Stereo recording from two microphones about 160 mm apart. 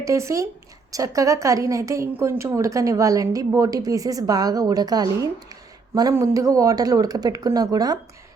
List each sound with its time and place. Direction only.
0.0 s a woman's voice: 20° right (ahead or behind)